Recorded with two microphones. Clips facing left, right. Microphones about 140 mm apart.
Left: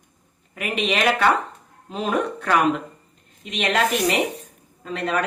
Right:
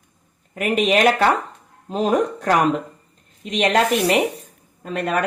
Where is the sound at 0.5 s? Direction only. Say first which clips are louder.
Right 6 dB; 45° right (ahead or behind).